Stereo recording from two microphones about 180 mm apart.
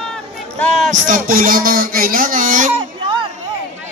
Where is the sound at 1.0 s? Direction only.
50° right (ahead or behind).